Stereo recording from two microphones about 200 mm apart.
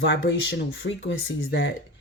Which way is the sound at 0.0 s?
65° left (ahead or behind).